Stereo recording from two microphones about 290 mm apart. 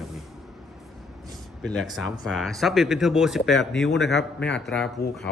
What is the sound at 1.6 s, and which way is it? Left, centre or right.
Speech, centre.